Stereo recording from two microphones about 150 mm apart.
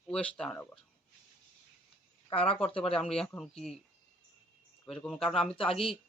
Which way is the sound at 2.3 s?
40° left (ahead or behind).